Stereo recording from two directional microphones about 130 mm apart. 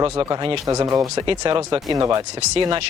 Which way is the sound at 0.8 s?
30° right (ahead or behind).